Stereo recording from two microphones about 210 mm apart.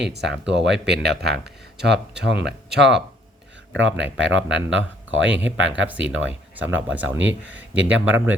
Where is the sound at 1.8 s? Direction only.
55° right (ahead or behind).